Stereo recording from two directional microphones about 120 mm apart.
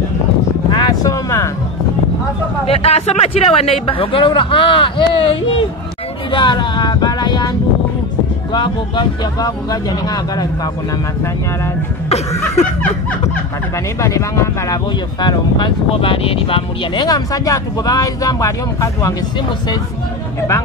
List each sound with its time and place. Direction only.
0.7 s vehicle: 35° left (ahead or behind)
2.6 s speech: 55° left (ahead or behind)
6.3 s a sound: 40° left (ahead or behind)
8.5 s speech: 40° left (ahead or behind)
13.9 s speech: 25° left (ahead or behind)
14.9 s speech: 40° left (ahead or behind)
15.9 s speech: 50° left (ahead or behind); by 19.1 s 30° left (ahead or behind)